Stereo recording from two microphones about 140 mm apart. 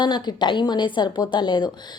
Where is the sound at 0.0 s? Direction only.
30° left (ahead or behind).